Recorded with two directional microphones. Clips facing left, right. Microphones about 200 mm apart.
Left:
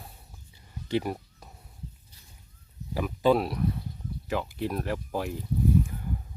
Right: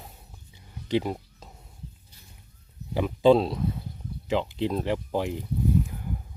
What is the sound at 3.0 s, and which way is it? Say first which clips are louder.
Speech: right 4 dB; 25° right (ahead or behind).